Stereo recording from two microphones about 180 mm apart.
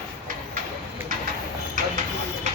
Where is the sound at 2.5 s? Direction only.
40° right (ahead or behind).